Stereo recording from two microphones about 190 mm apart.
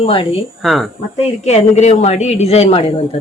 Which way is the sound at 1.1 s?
35° left (ahead or behind).